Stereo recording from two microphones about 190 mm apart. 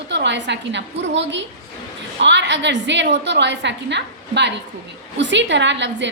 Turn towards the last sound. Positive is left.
turn(degrees=-65)  # may be behind; listen again after turning